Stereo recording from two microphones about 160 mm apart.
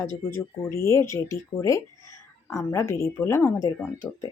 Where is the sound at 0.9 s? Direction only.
20° left (ahead or behind).